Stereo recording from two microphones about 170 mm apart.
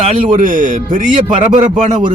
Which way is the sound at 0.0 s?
45° right (ahead or behind).